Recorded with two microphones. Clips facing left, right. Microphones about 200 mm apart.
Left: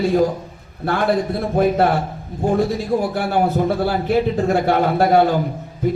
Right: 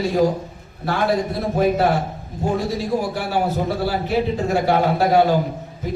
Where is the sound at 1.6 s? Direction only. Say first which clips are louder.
Left 2 dB; 55° left (ahead or behind).